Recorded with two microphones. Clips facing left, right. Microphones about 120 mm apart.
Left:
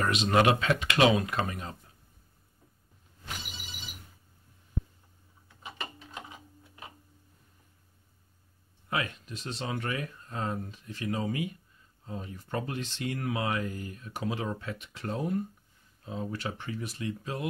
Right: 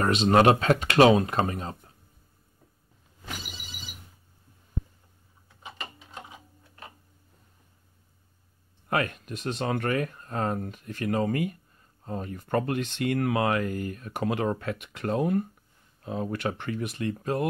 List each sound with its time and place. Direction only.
0.0 s speech: 35° right (ahead or behind)
8.8 s speech: 55° right (ahead or behind)